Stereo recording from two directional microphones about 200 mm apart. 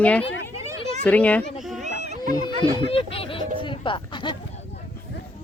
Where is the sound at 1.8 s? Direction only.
35° right (ahead or behind).